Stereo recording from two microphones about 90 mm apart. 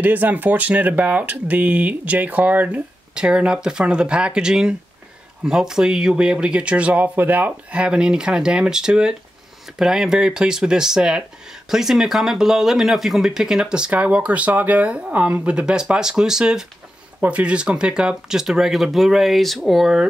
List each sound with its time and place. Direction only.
0.0 s speech: 20° right (ahead or behind)